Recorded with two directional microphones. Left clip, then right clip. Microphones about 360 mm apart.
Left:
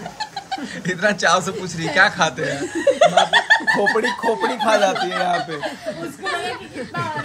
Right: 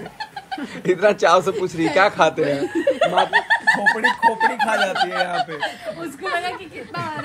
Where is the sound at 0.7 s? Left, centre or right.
Centre.